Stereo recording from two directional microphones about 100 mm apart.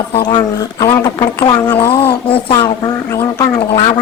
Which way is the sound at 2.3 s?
65° left (ahead or behind).